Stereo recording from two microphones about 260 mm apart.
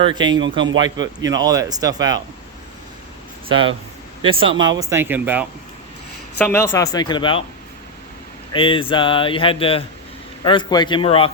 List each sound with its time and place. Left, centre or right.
0.0 s speech: centre
0.3 s a man's voice: right
1.2 s speech: centre
4.2 s speech: centre
6.4 s speech: centre
8.5 s speech: centre